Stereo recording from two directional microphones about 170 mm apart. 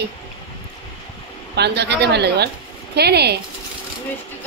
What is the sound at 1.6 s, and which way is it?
Speech, 80° right.